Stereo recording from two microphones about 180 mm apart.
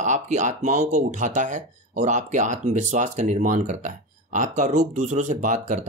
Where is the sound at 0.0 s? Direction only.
45° right (ahead or behind).